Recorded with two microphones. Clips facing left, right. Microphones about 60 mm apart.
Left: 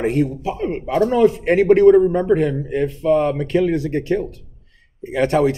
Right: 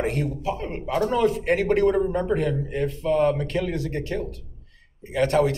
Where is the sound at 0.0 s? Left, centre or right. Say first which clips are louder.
Left 6 dB; centre.